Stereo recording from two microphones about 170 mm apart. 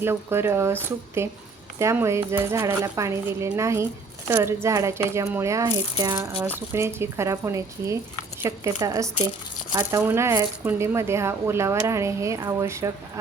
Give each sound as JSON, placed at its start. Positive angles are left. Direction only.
{"t": 0.0, "sound": "speech", "side_deg": -15}